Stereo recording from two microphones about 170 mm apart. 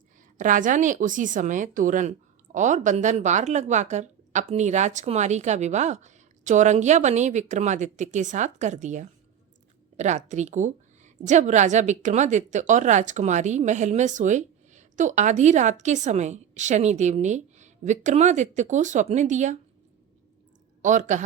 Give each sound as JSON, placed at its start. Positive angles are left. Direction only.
{"t": 0.3, "sound": "a woman's voice", "side_deg": -50}
{"t": 20.8, "sound": "a woman's voice", "side_deg": -45}